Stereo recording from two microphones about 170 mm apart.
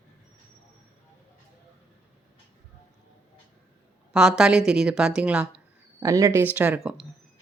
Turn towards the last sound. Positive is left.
turn(degrees=-10)  # may be behind; listen again after turning